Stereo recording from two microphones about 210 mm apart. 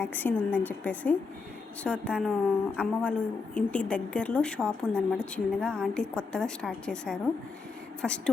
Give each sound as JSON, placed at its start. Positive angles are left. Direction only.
{"t": 0.0, "sound": "a woman's voice", "side_deg": 10}